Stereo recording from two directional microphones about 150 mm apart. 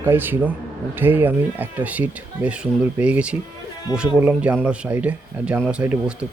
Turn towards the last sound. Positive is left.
turn(degrees=-5)  # may be behind; listen again after turning